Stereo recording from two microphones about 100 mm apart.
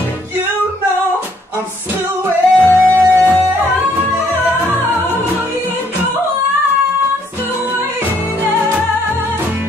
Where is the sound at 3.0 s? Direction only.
20° right (ahead or behind).